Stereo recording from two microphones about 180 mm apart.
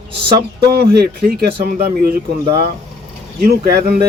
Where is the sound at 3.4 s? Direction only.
55° right (ahead or behind).